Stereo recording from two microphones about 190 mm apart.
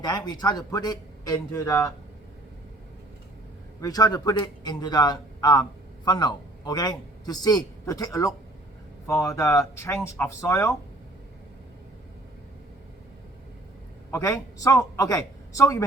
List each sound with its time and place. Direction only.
0.0 s a man's voice: 20° left (ahead or behind)
3.8 s a man's voice: 20° left (ahead or behind)
14.1 s a man's voice: 15° left (ahead or behind)